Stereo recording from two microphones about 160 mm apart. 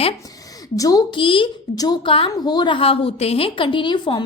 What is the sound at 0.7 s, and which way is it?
A woman's voice, 20° left (ahead or behind).